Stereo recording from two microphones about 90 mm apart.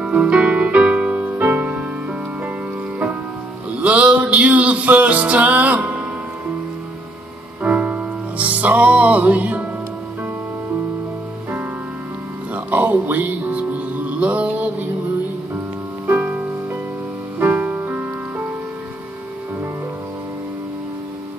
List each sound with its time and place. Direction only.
0.0 s music: 10° right (ahead or behind)
3.8 s music: 15° right (ahead or behind)
7.6 s music: 15° right (ahead or behind)
12.5 s music: 20° right (ahead or behind)
16.1 s music: 20° right (ahead or behind)